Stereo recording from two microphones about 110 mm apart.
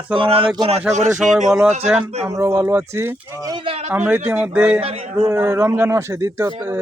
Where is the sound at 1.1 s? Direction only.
5° right (ahead or behind).